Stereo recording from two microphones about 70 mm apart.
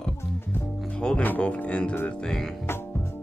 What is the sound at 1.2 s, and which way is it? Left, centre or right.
Speech, left.